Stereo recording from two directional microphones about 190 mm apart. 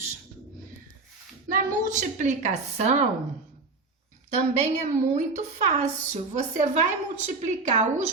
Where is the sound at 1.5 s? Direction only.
45° right (ahead or behind).